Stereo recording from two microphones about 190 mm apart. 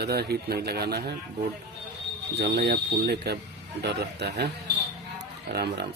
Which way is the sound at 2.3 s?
60° right (ahead or behind).